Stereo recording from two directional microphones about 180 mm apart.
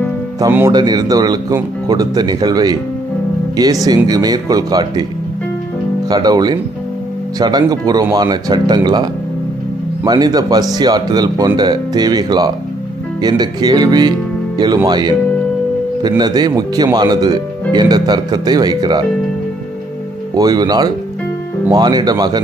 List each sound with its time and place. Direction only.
0.4 s speech: 15° right (ahead or behind)
3.8 s speech: 20° right (ahead or behind)
6.0 s speech: 20° right (ahead or behind)
20.3 s speech: 20° right (ahead or behind)